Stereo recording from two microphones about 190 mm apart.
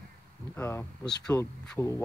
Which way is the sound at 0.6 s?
10° left (ahead or behind).